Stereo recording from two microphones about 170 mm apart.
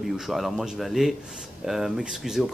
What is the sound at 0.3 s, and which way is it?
Speech, centre (ahead or behind).